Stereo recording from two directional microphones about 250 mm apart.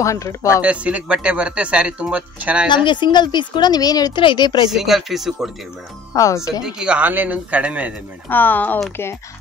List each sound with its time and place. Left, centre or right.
0.0 s a woman's voice: centre
0.6 s speech: centre
2.7 s a woman's voice: centre
4.6 s speech: centre
6.1 s a woman's voice: centre
6.6 s speech: centre
8.3 s a woman's voice: centre